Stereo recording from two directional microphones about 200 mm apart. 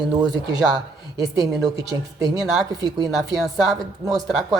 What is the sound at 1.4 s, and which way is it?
Speech, 15° right (ahead or behind).